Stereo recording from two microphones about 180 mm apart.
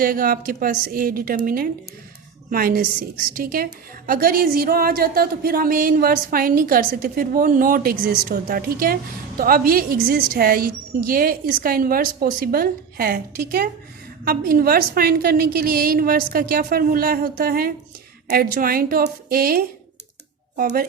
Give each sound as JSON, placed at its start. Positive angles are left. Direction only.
{"t": 0.0, "sound": "a woman's voice", "side_deg": -50}